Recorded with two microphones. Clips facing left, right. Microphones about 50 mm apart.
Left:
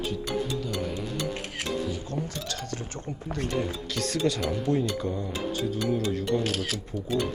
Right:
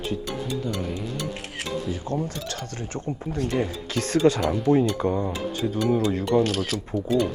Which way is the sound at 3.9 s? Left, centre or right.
Right.